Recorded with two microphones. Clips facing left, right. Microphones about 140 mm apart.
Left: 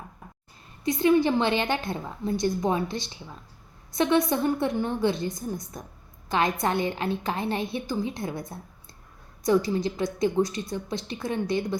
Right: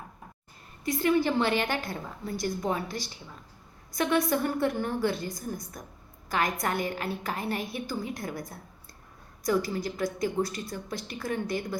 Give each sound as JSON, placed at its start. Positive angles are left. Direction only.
{"t": 0.9, "sound": "a woman's voice", "side_deg": 20}